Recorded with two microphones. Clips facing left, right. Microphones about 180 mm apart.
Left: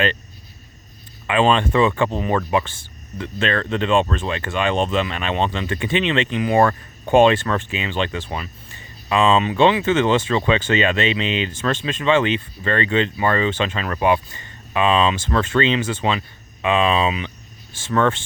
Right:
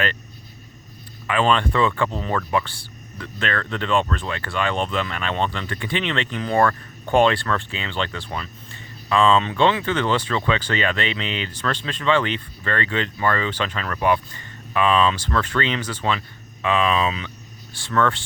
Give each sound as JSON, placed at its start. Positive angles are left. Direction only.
{"t": 1.3, "sound": "speech", "side_deg": 20}